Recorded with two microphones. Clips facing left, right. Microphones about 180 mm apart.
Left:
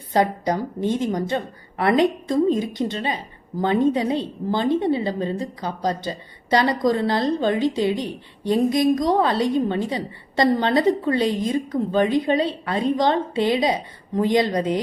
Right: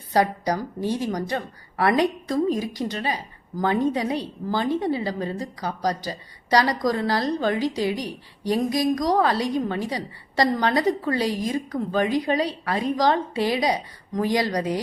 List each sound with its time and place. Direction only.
0.1 s a woman's voice: 25° left (ahead or behind)